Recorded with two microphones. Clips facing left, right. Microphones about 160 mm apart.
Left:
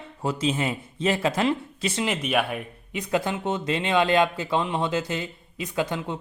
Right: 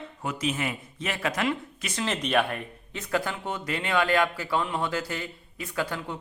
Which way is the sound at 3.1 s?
20° left (ahead or behind).